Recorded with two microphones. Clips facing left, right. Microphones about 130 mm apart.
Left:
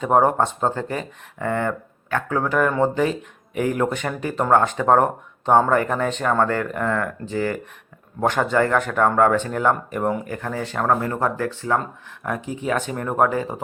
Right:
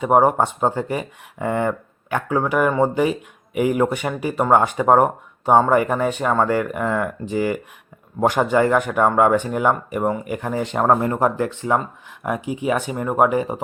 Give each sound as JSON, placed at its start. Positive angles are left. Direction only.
{"t": 0.0, "sound": "speech", "side_deg": -10}
{"t": 10.2, "sound": "speech", "side_deg": -15}